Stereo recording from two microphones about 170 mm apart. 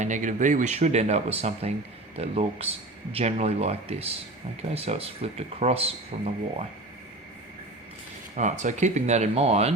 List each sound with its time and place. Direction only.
0.0 s speech: 45° right (ahead or behind)
8.4 s speech: 45° right (ahead or behind)